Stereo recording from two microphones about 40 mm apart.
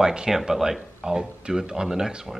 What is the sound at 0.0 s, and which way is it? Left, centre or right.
Speech, centre.